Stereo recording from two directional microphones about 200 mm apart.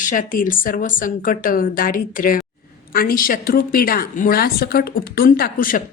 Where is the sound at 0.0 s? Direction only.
40° left (ahead or behind).